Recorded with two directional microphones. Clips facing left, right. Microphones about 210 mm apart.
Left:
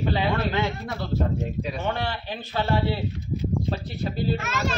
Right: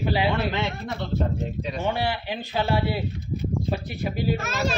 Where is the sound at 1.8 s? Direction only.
10° right (ahead or behind).